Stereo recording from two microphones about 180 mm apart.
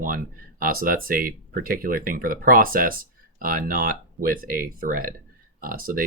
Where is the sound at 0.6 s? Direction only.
50° right (ahead or behind).